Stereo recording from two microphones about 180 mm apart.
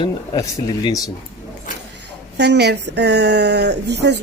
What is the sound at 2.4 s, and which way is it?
Speech, 65° right (ahead or behind).